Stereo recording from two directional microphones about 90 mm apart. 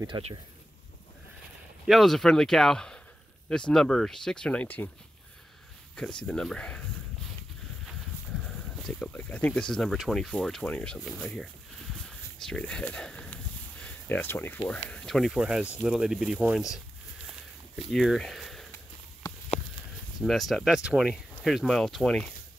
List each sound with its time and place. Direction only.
0.0 s speech: 65° right (ahead or behind)
1.9 s speech: centre (ahead or behind)
5.9 s speech: 10° left (ahead or behind)
8.4 s a sound: centre (ahead or behind)
9.1 s speech: 15° left (ahead or behind)
12.0 s a sound: 10° left (ahead or behind)
14.7 s speech: 10° left (ahead or behind)
15.3 s speech: 10° right (ahead or behind)
17.9 s speech: 5° left (ahead or behind)
20.2 s speech: centre (ahead or behind)
21.4 s speech: centre (ahead or behind)